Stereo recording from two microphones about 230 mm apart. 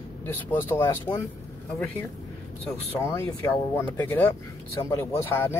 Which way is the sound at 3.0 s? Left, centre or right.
Centre.